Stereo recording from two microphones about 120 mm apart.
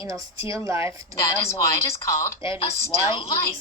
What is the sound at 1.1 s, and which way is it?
Speech, 25° left (ahead or behind).